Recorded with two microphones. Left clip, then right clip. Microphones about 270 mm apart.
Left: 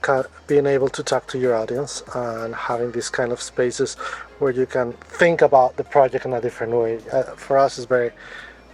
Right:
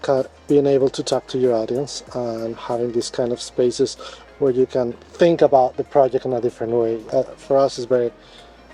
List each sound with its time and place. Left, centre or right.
0.0 s speech: left